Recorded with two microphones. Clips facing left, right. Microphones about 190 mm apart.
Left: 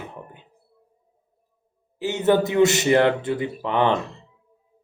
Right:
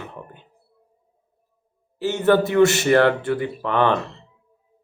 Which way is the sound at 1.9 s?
15° left (ahead or behind).